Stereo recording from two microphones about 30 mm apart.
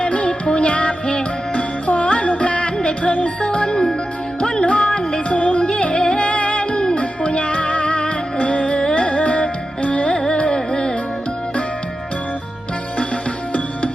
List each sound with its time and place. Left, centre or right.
0.0 s music: left
3.4 s music: left
5.3 s music: left
5.6 s music: left
6.1 s music: left
10.5 s music: left